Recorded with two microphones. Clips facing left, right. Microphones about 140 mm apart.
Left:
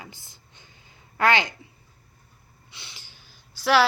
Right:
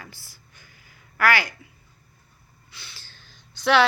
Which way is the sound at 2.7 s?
20° left (ahead or behind).